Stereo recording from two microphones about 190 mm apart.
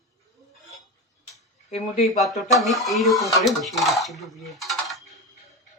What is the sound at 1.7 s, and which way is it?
Speech, 35° left (ahead or behind).